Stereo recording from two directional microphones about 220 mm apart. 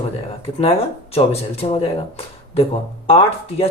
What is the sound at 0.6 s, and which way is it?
Speech, 25° left (ahead or behind).